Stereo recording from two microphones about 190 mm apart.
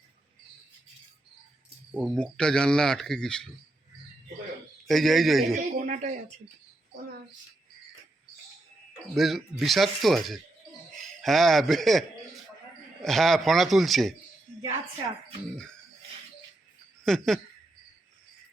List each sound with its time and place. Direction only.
1.9 s speech: 10° right (ahead or behind)
2.1 s speech: 5° left (ahead or behind)
4.9 s speech: centre (ahead or behind)
5.5 s speech: 40° right (ahead or behind)
9.1 s speech: centre (ahead or behind)
17.0 s speech: centre (ahead or behind)